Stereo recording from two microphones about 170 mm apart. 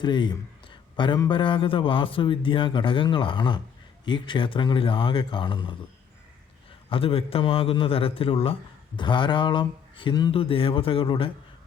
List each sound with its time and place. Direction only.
0.0 s a man's voice: 25° left (ahead or behind)
6.9 s a man's voice: 35° left (ahead or behind)